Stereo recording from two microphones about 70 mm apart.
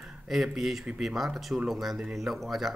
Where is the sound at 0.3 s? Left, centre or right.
Centre.